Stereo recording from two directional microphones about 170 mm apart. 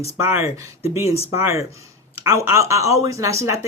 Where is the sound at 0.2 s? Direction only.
15° right (ahead or behind).